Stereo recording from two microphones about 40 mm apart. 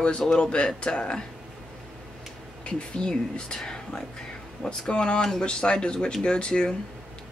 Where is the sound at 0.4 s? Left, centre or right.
Left.